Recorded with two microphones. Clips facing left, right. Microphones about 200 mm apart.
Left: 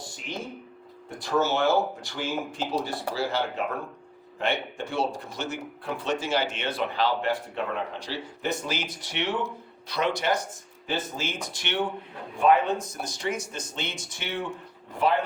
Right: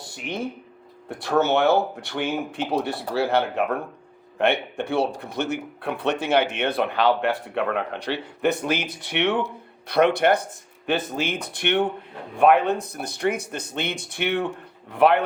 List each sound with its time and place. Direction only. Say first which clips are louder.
1.2 s speech: right 4 dB; 60° right (ahead or behind)